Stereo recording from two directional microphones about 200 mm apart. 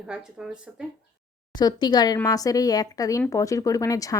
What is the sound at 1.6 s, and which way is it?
A woman's voice, 20° left (ahead or behind).